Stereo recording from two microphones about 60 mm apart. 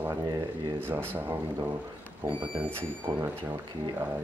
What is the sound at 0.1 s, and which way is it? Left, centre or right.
Speech, right.